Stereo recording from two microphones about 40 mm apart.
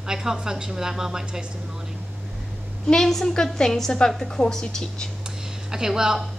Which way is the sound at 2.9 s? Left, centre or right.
Centre.